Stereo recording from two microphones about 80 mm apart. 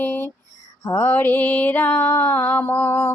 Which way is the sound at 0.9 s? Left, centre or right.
Left.